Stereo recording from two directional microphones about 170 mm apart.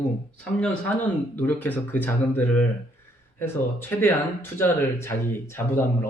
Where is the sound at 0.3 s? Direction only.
5° left (ahead or behind).